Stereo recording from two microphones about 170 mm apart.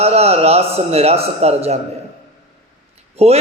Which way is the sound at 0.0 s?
35° right (ahead or behind).